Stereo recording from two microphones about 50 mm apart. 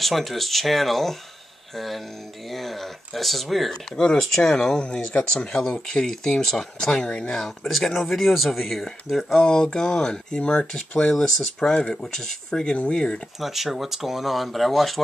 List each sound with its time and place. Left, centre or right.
0.0 s speech: centre
2.5 s speech: centre
3.9 s speech: centre
7.4 s speech: centre
9.4 s speech: centre
13.4 s speech: centre